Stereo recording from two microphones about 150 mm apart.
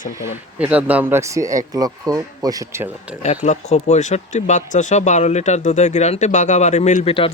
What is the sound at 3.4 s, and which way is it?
Speech, 50° left (ahead or behind).